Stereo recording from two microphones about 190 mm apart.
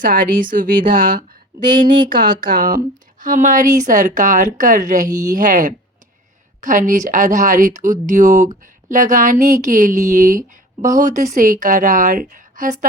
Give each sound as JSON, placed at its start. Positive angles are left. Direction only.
{"t": 0.0, "sound": "a woman's voice", "side_deg": -45}